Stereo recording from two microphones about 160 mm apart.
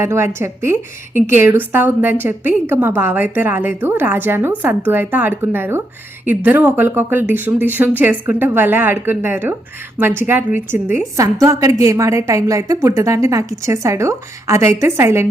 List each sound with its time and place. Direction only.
0.0 s a woman's voice: 15° right (ahead or behind)